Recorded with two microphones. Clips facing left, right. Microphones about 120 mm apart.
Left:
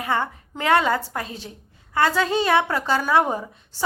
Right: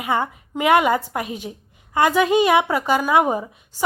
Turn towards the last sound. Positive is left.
turn(degrees=-15)  # may be behind; listen again after turning